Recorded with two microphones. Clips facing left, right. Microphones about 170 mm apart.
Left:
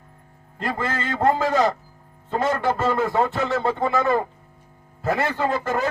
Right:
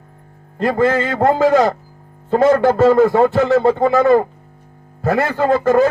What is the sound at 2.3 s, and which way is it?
A man's voice, 40° right (ahead or behind).